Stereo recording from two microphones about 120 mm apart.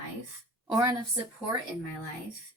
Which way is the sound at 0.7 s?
30° right (ahead or behind).